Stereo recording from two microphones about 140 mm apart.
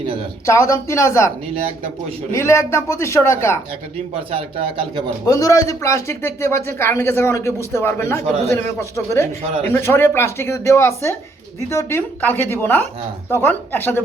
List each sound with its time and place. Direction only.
0.4 s speech: 20° left (ahead or behind)
2.3 s speech: 20° left (ahead or behind)
4.3 s a man's voice: 40° right (ahead or behind)
5.2 s speech: 25° left (ahead or behind)